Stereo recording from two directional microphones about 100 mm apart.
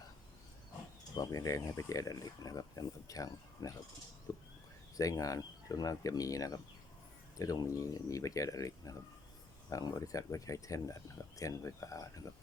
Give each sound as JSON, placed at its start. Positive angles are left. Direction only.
{"t": 1.1, "sound": "speech", "side_deg": 35}